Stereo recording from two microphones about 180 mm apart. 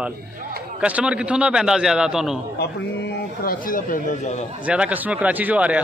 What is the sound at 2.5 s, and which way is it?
A man's voice, 60° left (ahead or behind).